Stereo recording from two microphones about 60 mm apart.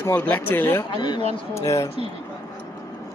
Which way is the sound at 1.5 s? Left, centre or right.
Left.